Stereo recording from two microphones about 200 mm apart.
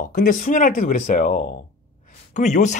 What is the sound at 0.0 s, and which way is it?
Speech, 40° left (ahead or behind).